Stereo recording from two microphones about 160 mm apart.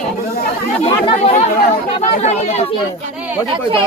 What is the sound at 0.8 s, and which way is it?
Speech, 35° left (ahead or behind).